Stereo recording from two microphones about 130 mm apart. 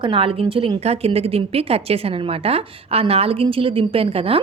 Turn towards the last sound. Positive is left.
turn(degrees=-45)  # may be behind; listen again after turning